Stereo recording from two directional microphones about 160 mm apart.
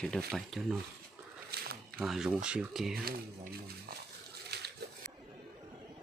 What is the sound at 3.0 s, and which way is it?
Speech, 70° right (ahead or behind).